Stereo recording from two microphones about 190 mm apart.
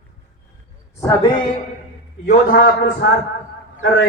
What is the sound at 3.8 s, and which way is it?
Speech, 90° left.